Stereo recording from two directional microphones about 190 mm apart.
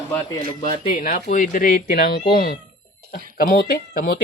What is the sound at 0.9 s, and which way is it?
Speech, 45° left (ahead or behind).